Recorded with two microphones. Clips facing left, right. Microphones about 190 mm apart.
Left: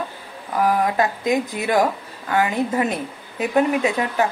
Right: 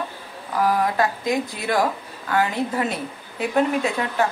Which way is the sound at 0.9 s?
15° left (ahead or behind).